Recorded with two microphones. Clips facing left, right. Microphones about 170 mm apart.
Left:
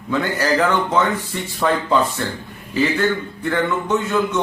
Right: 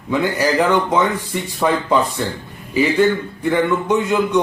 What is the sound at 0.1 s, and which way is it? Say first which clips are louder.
Speech: right 2 dB; 15° right (ahead or behind).